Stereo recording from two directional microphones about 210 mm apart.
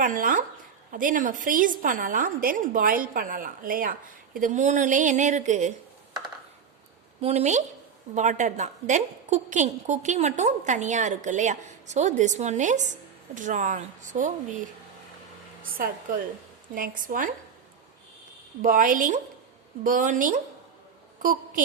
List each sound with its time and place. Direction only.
0.0 s a woman's voice: 40° right (ahead or behind)
7.2 s a woman's voice: 30° right (ahead or behind)
16.7 s a woman's voice: 40° right (ahead or behind)
18.6 s a woman's voice: 40° right (ahead or behind)